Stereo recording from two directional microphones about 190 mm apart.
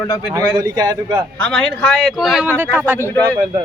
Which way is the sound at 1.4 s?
5° left (ahead or behind).